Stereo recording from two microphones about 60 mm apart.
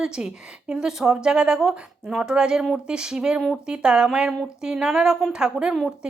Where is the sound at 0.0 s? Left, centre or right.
Centre.